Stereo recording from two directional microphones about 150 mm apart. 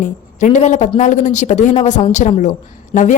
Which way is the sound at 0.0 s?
55° left (ahead or behind).